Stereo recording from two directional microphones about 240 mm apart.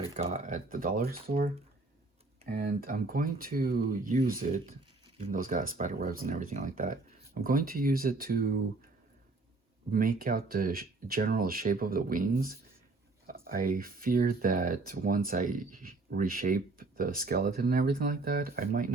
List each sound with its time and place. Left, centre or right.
0.1 s speech: right
9.9 s speech: right